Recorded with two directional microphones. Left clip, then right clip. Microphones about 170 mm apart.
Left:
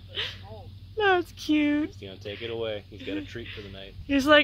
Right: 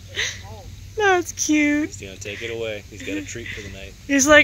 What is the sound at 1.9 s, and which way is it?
Speech, 30° left (ahead or behind).